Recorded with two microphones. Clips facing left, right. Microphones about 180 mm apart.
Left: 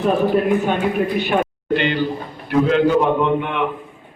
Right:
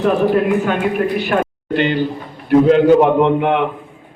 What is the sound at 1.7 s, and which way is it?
A man's voice, 45° right (ahead or behind).